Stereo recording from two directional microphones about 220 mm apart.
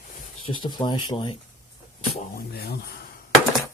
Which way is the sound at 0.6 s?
20° left (ahead or behind).